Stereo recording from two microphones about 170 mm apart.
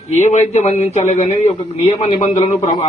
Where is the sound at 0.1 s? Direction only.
40° left (ahead or behind).